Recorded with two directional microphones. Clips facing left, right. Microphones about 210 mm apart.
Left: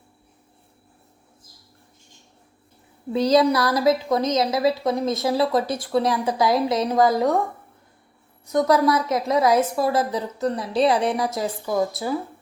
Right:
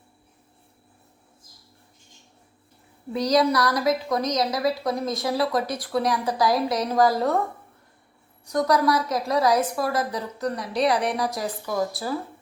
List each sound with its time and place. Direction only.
3.1 s a woman's voice: 25° left (ahead or behind)
8.4 s a woman's voice: 25° left (ahead or behind)